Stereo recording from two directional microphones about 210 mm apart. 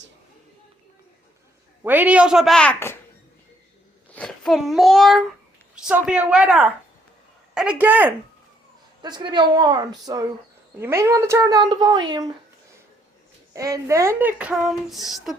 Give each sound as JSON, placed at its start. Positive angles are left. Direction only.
{"t": 1.8, "sound": "speech", "side_deg": -10}
{"t": 4.1, "sound": "a child's voice", "side_deg": 5}
{"t": 9.0, "sound": "a woman's voice", "side_deg": -20}
{"t": 13.5, "sound": "speech", "side_deg": -15}